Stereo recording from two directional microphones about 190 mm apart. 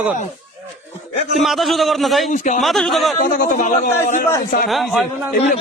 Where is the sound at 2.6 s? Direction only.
Centre (ahead or behind).